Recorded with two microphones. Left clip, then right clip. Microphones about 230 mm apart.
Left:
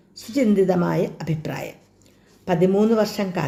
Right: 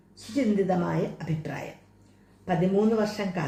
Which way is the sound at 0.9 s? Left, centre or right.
Left.